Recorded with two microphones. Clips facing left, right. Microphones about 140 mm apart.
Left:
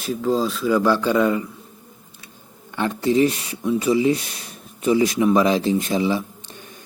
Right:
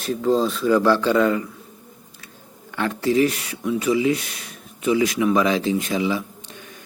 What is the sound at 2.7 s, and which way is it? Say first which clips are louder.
Speech: left 1 dB; 20° left (ahead or behind).